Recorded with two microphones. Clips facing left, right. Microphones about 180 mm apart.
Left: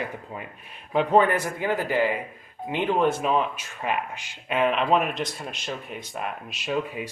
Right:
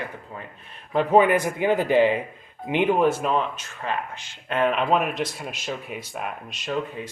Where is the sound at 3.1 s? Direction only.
Centre (ahead or behind).